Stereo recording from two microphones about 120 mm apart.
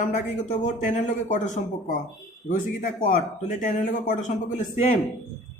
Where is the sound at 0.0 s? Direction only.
90° left.